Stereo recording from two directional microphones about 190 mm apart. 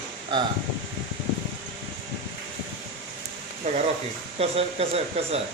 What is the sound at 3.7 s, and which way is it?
Speech, 35° right (ahead or behind).